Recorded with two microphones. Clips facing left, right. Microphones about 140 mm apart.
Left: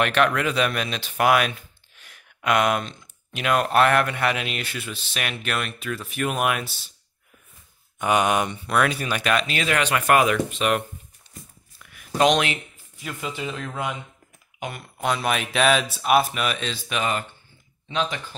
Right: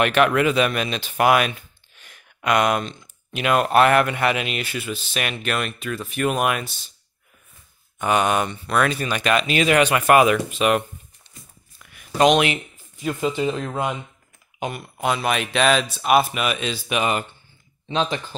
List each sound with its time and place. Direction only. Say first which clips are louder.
0.0 s speech: right 3 dB; 5° right (ahead or behind)
8.0 s speech: right 1 dB; 10° left (ahead or behind)
9.5 s speech: right 6 dB; 15° right (ahead or behind)
11.8 s a sound: right 2 dB; centre (ahead or behind)
12.4 s a sound: right 4 dB; 15° right (ahead or behind)
13.0 s speech: right 9 dB; 30° right (ahead or behind)
14.6 s speech: right 4 dB; 15° right (ahead or behind)
15.0 s speech: right 2 dB; centre (ahead or behind); by 17.3 s 15° right (ahead or behind)
17.8 s speech: right 3 dB; 30° right (ahead or behind)